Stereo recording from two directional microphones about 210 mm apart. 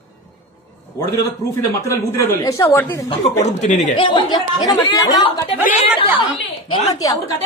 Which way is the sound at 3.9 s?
20° left (ahead or behind).